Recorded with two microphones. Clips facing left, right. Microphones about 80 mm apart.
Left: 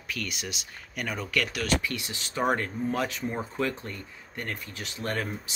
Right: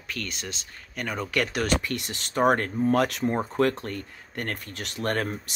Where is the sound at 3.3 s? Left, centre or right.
Right.